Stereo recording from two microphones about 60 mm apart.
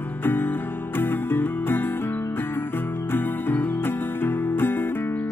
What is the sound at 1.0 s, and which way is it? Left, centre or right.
Music, left.